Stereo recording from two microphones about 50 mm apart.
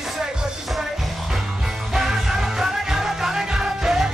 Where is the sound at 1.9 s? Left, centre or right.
Centre.